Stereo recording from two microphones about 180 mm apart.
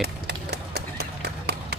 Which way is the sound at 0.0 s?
65° right (ahead or behind).